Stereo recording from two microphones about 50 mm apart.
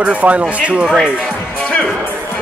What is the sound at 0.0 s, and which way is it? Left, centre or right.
Speech, right.